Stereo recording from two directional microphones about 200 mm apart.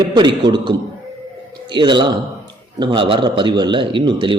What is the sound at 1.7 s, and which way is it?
A man's voice, 25° right (ahead or behind).